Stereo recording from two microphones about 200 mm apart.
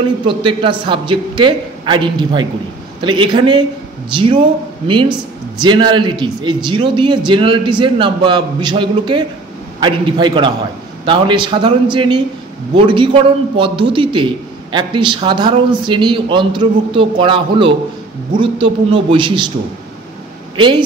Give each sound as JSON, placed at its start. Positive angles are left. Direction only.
{"t": 0.3, "sound": "a man's voice", "side_deg": -25}
{"t": 20.5, "sound": "speech", "side_deg": -25}